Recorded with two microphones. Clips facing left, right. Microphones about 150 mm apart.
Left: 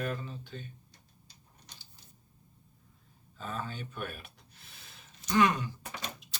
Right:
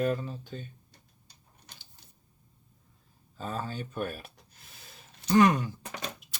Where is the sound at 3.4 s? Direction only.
35° right (ahead or behind).